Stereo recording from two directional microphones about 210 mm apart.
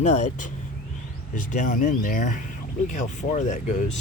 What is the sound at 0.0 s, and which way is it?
Speech, 35° left (ahead or behind).